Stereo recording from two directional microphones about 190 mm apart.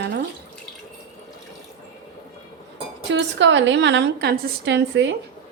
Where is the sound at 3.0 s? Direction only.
70° right (ahead or behind).